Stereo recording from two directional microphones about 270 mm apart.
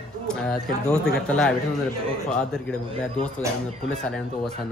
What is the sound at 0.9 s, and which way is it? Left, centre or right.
Speech, centre.